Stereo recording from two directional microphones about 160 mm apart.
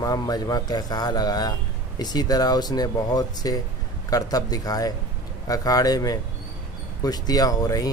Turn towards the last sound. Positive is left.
turn(degrees=25)  # may be behind; listen again after turning